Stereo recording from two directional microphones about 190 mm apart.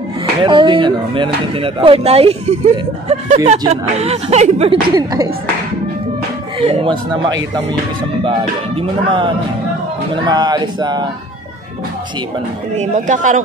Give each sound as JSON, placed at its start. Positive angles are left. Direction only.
{"t": 0.4, "sound": "speech", "side_deg": -25}
{"t": 4.9, "sound": "speech", "side_deg": -20}
{"t": 6.6, "sound": "speech", "side_deg": -30}
{"t": 8.7, "sound": "speech", "side_deg": -25}
{"t": 12.7, "sound": "speech", "side_deg": -40}